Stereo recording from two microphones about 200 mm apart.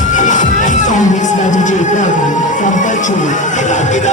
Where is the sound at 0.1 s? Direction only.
40° left (ahead or behind).